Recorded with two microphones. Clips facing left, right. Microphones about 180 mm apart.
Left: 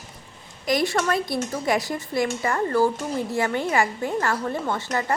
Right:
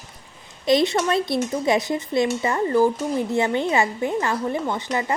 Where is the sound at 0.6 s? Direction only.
20° right (ahead or behind).